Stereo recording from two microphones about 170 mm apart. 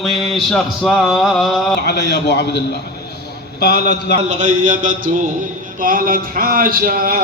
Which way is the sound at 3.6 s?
75° left (ahead or behind).